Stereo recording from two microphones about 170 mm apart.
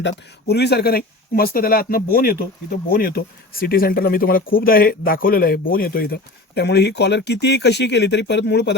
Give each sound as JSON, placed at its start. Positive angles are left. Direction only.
{"t": 0.0, "sound": "speech", "side_deg": 80}